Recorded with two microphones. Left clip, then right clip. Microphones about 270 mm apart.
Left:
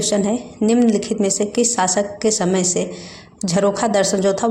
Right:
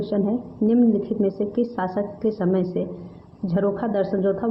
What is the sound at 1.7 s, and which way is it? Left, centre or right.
A woman's voice, left.